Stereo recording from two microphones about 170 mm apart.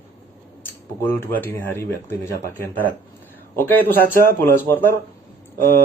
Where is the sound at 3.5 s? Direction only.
10° left (ahead or behind).